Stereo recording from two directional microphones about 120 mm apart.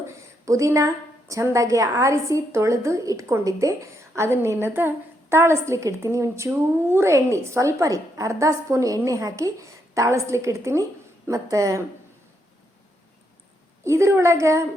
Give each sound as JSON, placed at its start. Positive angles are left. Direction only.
{"t": 0.2, "sound": "a sound", "side_deg": -25}
{"t": 1.3, "sound": "a woman's voice", "side_deg": -25}
{"t": 13.8, "sound": "a woman's voice", "side_deg": -25}